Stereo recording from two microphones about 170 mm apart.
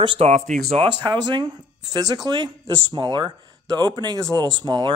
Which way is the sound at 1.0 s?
25° right (ahead or behind).